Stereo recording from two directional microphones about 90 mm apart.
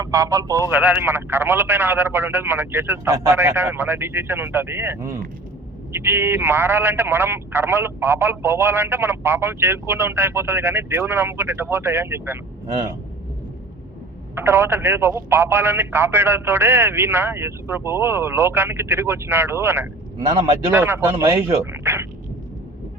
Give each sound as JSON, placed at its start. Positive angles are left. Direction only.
{"t": 0.0, "sound": "speech", "side_deg": -35}
{"t": 0.7, "sound": "speech", "side_deg": -20}
{"t": 14.3, "sound": "speech", "side_deg": -25}
{"t": 20.1, "sound": "speech", "side_deg": -40}
{"t": 21.1, "sound": "speech", "side_deg": -35}